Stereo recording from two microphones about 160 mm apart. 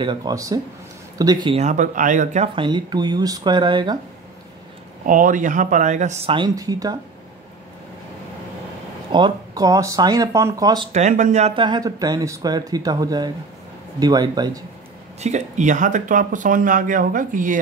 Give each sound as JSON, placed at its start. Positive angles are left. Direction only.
{"t": 0.0, "sound": "speech", "side_deg": -25}
{"t": 1.5, "sound": "speech", "side_deg": -45}
{"t": 2.5, "sound": "speech", "side_deg": -30}
{"t": 5.0, "sound": "speech", "side_deg": -55}
{"t": 6.3, "sound": "speech", "side_deg": -25}
{"t": 9.1, "sound": "speech", "side_deg": -25}
{"t": 10.9, "sound": "speech", "side_deg": -45}
{"t": 11.5, "sound": "speech", "side_deg": -30}
{"t": 15.1, "sound": "speech", "side_deg": -45}